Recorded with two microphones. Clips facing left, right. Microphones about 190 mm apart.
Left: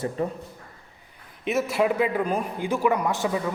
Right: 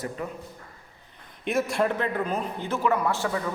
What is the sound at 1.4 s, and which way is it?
A man's voice, 5° left (ahead or behind).